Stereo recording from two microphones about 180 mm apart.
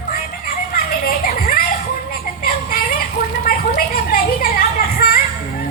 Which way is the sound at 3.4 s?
55° left (ahead or behind).